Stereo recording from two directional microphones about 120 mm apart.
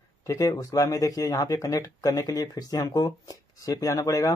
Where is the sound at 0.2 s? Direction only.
25° left (ahead or behind).